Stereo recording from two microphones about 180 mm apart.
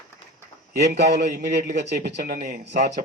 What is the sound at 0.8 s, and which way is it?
A man's voice, 70° right (ahead or behind).